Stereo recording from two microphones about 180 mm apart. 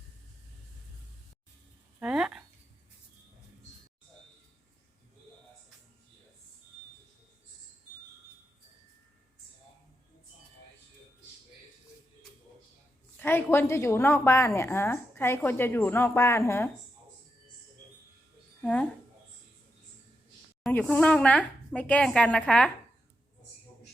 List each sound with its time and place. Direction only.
2.0 s a sound: 5° right (ahead or behind)
13.1 s a woman's voice: 10° left (ahead or behind)
18.6 s speech: 10° left (ahead or behind)
20.7 s a woman's voice: 5° left (ahead or behind)